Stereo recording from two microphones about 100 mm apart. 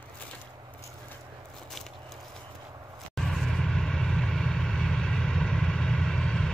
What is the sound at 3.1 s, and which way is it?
Vehicle, centre (ahead or behind).